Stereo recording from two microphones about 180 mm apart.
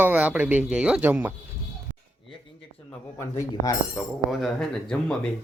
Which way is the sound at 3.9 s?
Centre (ahead or behind).